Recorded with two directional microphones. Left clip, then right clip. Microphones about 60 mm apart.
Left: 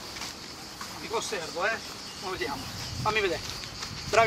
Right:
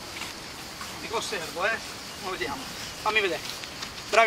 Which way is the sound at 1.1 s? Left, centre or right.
Centre.